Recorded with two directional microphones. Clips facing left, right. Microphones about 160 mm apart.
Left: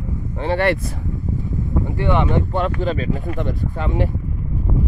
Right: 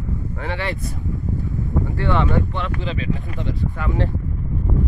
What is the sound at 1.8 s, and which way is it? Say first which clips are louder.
Speech: left 2 dB; 20° left (ahead or behind).